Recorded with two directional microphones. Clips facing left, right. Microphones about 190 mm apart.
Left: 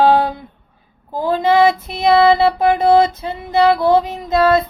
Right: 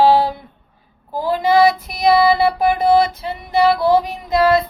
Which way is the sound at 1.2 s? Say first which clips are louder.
Left 1 dB; 20° left (ahead or behind).